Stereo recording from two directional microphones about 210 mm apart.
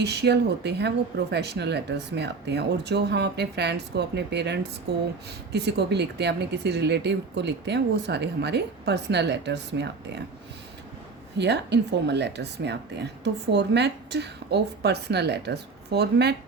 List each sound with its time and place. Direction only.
0.0 s speech: 50° right (ahead or behind)
11.3 s speech: 55° right (ahead or behind)